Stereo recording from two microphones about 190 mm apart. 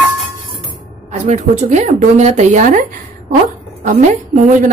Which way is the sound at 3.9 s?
40° right (ahead or behind).